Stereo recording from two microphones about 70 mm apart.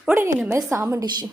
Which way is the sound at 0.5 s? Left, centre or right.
Right.